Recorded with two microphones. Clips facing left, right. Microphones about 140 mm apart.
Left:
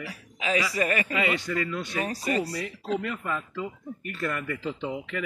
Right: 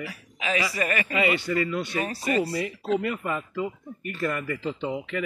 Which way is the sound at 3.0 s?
10° right (ahead or behind).